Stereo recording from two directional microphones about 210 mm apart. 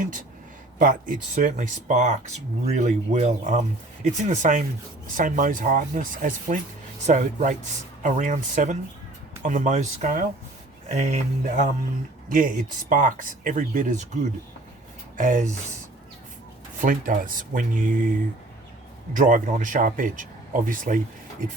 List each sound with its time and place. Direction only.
0.8 s speech: 40° right (ahead or behind)
15.1 s speech: 40° right (ahead or behind)
16.8 s speech: 40° right (ahead or behind)
19.1 s speech: 40° right (ahead or behind)